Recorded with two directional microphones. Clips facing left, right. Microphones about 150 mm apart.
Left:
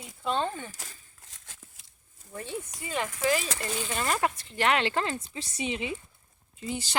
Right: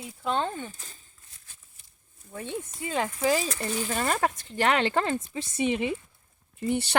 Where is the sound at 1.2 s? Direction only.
90° left.